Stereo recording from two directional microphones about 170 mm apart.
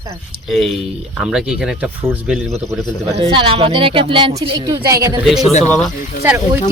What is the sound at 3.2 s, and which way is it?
Speech, 30° right (ahead or behind).